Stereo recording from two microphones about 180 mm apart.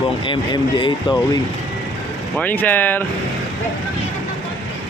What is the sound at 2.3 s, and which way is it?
Speech, 10° left (ahead or behind).